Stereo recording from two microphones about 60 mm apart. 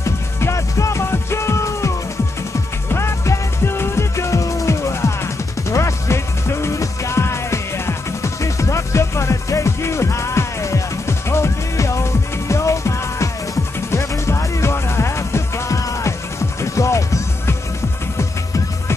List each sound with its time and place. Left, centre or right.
0.0 s music: left
2.9 s music: left
15.8 s music: left